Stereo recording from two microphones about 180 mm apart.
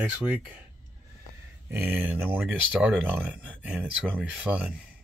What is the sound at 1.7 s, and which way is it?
Speech, 10° right (ahead or behind).